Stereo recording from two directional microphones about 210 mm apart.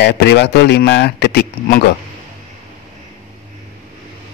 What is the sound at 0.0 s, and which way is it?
Speech, 50° left (ahead or behind).